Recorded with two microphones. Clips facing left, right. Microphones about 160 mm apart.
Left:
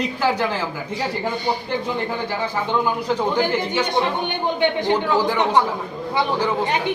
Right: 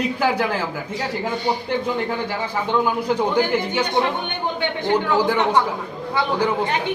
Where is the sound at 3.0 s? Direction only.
15° right (ahead or behind).